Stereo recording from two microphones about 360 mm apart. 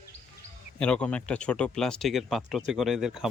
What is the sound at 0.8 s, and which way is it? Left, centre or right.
Speech, centre.